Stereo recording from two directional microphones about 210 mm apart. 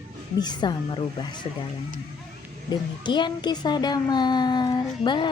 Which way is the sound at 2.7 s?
20° left (ahead or behind).